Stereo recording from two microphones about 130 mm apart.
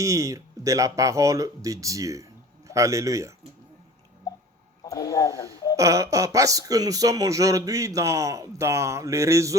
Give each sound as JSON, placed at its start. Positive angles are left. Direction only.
{"t": 0.0, "sound": "speech", "side_deg": -25}
{"t": 4.8, "sound": "speech", "side_deg": 25}
{"t": 5.7, "sound": "speech", "side_deg": -25}